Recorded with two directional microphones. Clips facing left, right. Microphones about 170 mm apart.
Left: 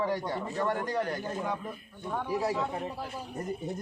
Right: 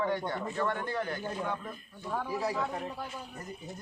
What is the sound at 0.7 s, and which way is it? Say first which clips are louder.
Speech: left 3 dB; 35° left (ahead or behind).